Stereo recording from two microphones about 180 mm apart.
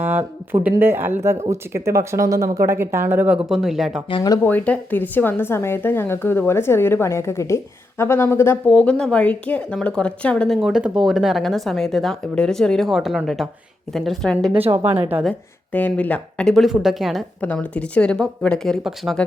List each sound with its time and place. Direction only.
0.0 s speech: 10° right (ahead or behind)
3.5 s speech: centre (ahead or behind)
4.1 s speech: 20° left (ahead or behind)
4.4 s speech: 10° left (ahead or behind)
14.5 s speech: 30° right (ahead or behind)
15.1 s speech: 5° left (ahead or behind)